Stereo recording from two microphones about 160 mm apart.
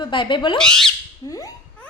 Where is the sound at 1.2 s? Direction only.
20° left (ahead or behind).